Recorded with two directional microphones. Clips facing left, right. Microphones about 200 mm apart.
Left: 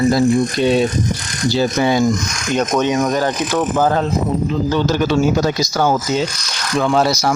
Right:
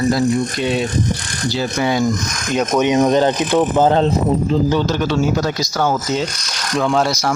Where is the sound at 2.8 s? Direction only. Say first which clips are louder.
Right 3 dB; 20° right (ahead or behind).